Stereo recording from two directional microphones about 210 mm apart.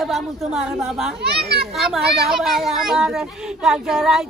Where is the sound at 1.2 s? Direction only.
50° right (ahead or behind).